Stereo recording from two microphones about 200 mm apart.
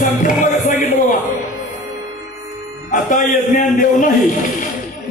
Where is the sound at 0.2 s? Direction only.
40° left (ahead or behind).